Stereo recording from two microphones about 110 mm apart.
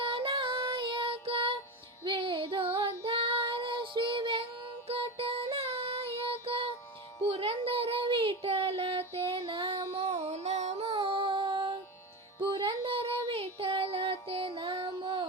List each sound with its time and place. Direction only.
0.0 s child singing: 55° right (ahead or behind)
2.0 s female singing: 50° right (ahead or behind)
4.9 s child singing: 60° right (ahead or behind)
12.4 s music: 50° right (ahead or behind)